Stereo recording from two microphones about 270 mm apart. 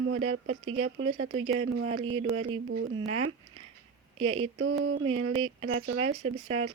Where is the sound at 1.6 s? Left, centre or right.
Right.